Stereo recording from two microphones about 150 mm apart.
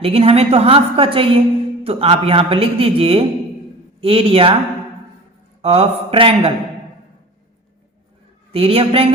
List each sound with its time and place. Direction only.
0.0 s speech: 40° right (ahead or behind)
5.6 s speech: 40° right (ahead or behind)
8.5 s speech: 40° right (ahead or behind)